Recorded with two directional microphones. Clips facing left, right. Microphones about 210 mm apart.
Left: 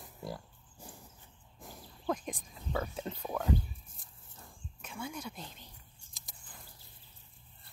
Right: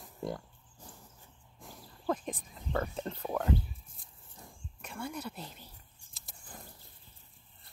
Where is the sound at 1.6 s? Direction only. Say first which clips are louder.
Right 1 dB; centre (ahead or behind).